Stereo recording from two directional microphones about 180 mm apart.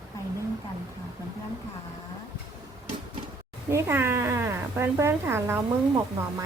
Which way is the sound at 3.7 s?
15° right (ahead or behind).